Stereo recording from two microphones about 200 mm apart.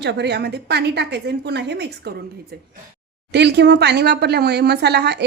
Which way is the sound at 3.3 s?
55° right (ahead or behind).